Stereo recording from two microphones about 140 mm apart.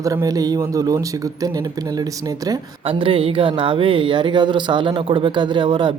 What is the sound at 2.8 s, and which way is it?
Speech, 40° right (ahead or behind).